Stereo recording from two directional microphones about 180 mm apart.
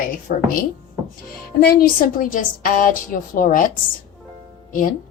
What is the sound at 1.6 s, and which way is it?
A woman's voice, 55° left (ahead or behind).